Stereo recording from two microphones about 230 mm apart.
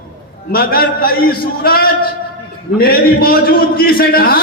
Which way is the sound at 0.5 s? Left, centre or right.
Left.